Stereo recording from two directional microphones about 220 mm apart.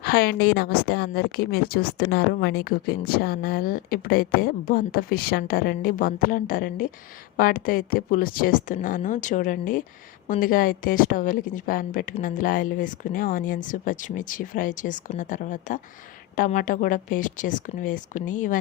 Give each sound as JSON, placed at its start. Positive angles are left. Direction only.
{"t": 0.0, "sound": "a woman's voice", "side_deg": 45}